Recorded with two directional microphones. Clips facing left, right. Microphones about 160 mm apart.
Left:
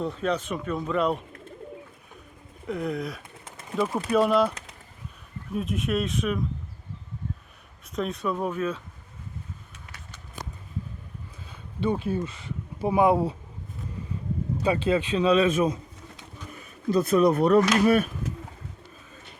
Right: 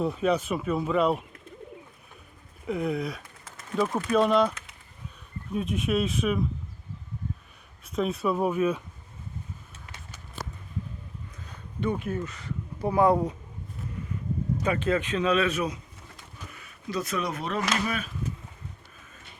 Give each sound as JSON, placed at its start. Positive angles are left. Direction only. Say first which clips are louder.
{"t": 0.0, "sound": "speech", "louder": "right 2 dB", "side_deg": -10}
{"t": 2.6, "sound": "speech", "louder": "right 1 dB", "side_deg": -5}
{"t": 3.4, "sound": "a sound", "louder": "right 1 dB", "side_deg": 20}
{"t": 3.8, "sound": "speech", "louder": "left 1 dB", "side_deg": 5}
{"t": 5.5, "sound": "speech", "louder": "even", "side_deg": 0}
{"t": 7.9, "sound": "speech", "louder": "right 2 dB", "side_deg": -5}
{"t": 11.8, "sound": "speech", "louder": "left 3 dB", "side_deg": 30}
{"t": 14.6, "sound": "speech", "louder": "left 3 dB", "side_deg": 30}
{"t": 16.6, "sound": "a sound", "louder": "left 8 dB", "side_deg": 35}
{"t": 17.7, "sound": "speech", "louder": "left 10 dB", "side_deg": 45}